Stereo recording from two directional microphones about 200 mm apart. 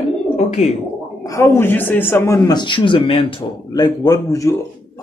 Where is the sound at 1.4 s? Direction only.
10° left (ahead or behind).